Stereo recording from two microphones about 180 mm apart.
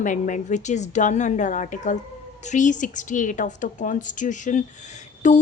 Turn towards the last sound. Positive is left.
turn(degrees=40)  # may be behind; listen again after turning